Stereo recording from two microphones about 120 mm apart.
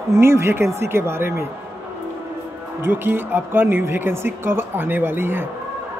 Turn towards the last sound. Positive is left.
turn(degrees=-20)  # may be behind; listen again after turning